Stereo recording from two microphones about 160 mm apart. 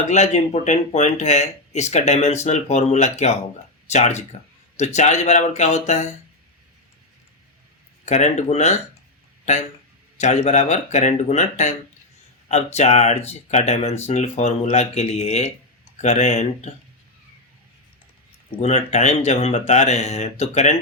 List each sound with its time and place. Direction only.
0.1 s speech: 45° left (ahead or behind)
8.0 s speech: 50° left (ahead or behind)
10.2 s speech: 45° left (ahead or behind)
18.6 s speech: 45° left (ahead or behind)